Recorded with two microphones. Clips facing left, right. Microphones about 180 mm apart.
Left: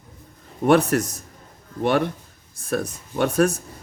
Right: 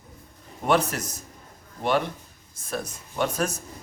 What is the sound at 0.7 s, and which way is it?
Speech, 60° left (ahead or behind).